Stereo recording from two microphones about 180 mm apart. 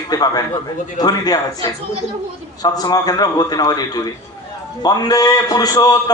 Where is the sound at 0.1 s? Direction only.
20° left (ahead or behind).